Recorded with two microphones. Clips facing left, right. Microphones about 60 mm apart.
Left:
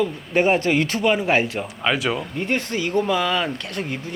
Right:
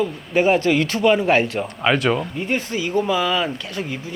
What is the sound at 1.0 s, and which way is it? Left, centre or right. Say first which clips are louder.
Speech: right 4 dB; centre.